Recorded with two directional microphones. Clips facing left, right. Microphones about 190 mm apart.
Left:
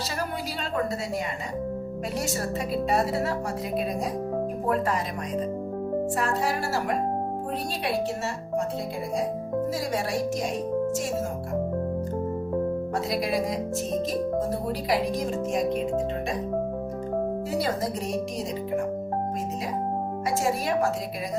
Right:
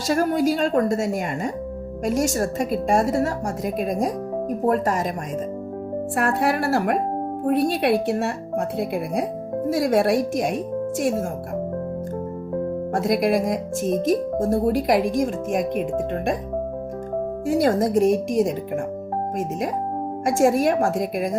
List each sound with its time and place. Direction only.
0.1 s speech: 45° right (ahead or behind)
6.1 s speech: 60° right (ahead or behind)
12.9 s speech: 50° right (ahead or behind)
17.5 s speech: 50° right (ahead or behind)
20.2 s speech: 50° right (ahead or behind)